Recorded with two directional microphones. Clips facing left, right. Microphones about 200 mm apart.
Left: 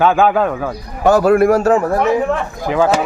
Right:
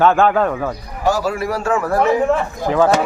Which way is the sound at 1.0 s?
55° left (ahead or behind).